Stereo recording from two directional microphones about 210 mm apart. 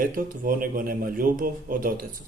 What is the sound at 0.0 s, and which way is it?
A man's voice, 40° right (ahead or behind).